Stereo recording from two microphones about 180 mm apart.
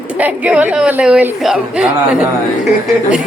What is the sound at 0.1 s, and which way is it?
Speech, 10° right (ahead or behind).